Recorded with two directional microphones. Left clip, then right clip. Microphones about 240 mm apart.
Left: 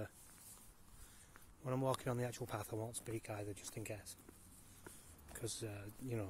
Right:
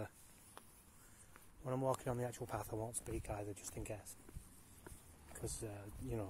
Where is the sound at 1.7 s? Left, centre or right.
Centre.